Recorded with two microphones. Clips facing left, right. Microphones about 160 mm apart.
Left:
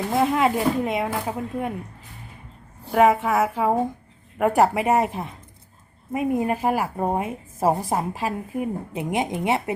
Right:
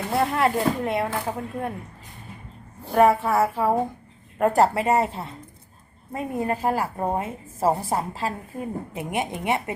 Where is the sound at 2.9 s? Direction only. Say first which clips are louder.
Even; 15° left (ahead or behind).